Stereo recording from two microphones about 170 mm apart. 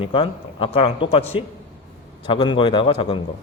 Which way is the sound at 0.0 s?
30° left (ahead or behind).